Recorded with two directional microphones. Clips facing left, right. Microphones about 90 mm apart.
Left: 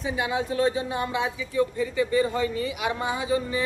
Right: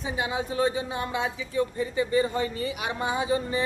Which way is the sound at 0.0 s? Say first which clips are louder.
Left 2 dB; 25° right (ahead or behind).